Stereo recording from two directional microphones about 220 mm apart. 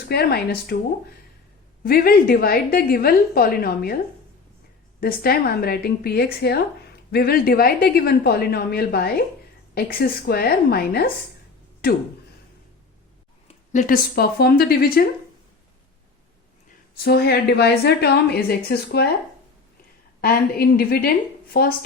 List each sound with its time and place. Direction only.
0.1 s a woman's voice: 45° left (ahead or behind)
1.8 s a woman's voice: 40° left (ahead or behind)
4.9 s a woman's voice: 40° left (ahead or behind)
13.5 s a woman's voice: 35° left (ahead or behind)
17.0 s a woman's voice: 45° left (ahead or behind)
20.2 s a woman's voice: 45° left (ahead or behind)